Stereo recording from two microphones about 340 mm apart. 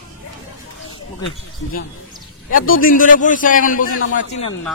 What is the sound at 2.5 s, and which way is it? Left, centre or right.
A man's voice, left.